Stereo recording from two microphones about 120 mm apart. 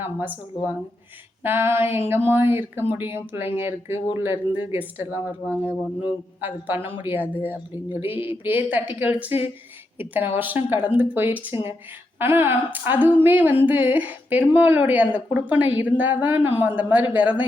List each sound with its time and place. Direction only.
0.0 s a woman's voice: 15° right (ahead or behind)
1.5 s a woman's voice: 20° right (ahead or behind)